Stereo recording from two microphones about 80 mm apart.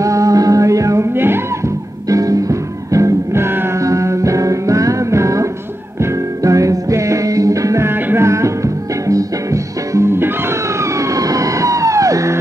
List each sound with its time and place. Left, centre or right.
0.0 s music: right
1.1 s music: right
2.0 s music: right
7.9 s music: right
8.3 s music: right
10.8 s emergency vehicle: right